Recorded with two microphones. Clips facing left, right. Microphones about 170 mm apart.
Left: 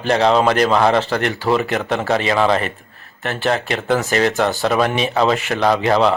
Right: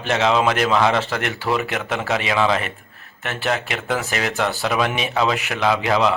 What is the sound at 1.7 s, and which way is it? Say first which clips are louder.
Speech: left 5 dB; centre (ahead or behind).